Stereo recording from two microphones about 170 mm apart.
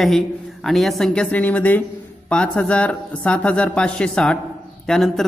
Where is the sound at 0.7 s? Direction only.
Centre (ahead or behind).